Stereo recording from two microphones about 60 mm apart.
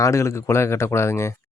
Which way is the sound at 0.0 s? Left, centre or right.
Left.